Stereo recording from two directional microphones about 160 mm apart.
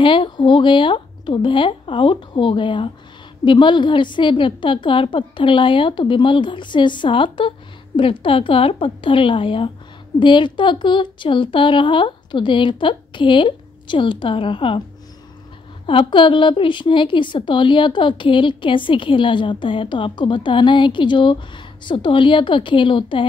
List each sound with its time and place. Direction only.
0.0 s a woman's voice: 30° left (ahead or behind)
15.9 s a woman's voice: 30° left (ahead or behind)